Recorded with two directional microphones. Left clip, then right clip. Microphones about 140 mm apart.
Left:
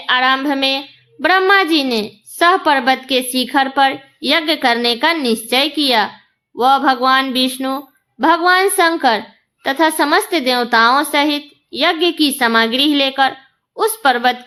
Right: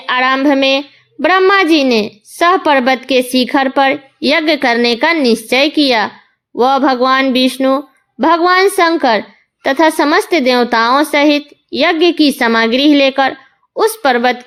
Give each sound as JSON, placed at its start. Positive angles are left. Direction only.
{"t": 0.0, "sound": "a woman's voice", "side_deg": -45}